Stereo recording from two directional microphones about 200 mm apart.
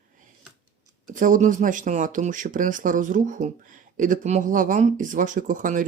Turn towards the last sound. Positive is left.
turn(degrees=-40)  # may be behind; listen again after turning